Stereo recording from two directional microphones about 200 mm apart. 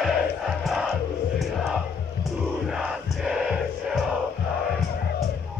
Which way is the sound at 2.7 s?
Centre (ahead or behind).